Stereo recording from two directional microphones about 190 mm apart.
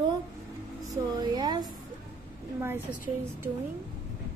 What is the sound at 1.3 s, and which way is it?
Speech, 20° right (ahead or behind).